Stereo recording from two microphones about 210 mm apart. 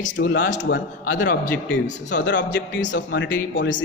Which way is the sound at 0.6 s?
55° left (ahead or behind).